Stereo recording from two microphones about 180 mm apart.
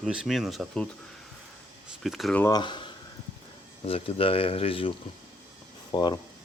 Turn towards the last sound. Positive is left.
turn(degrees=25)  # may be behind; listen again after turning